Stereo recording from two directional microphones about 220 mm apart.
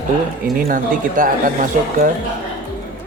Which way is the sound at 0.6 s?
40° right (ahead or behind).